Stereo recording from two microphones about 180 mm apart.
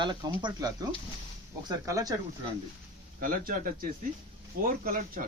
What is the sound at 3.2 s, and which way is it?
Speech, 50° right (ahead or behind).